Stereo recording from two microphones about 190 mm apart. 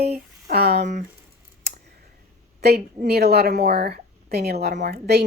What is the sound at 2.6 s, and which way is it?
A woman's voice, 55° right (ahead or behind).